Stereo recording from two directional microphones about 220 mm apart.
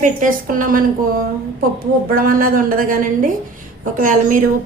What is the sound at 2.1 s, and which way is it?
A woman's voice, 40° right (ahead or behind).